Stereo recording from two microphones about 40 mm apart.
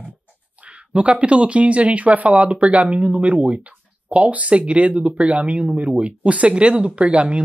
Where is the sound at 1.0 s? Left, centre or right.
Right.